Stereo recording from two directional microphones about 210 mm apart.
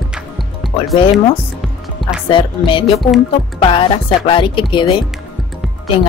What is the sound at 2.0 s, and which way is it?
Music, centre (ahead or behind).